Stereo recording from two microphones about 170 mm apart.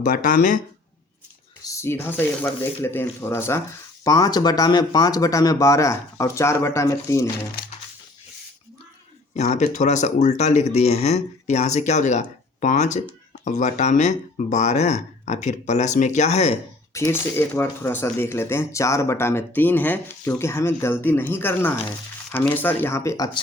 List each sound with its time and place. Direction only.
0.0 s speech: 50° left (ahead or behind)
1.6 s speech: 15° left (ahead or behind)
9.3 s speech: 40° left (ahead or behind)
16.9 s speech: 15° left (ahead or behind)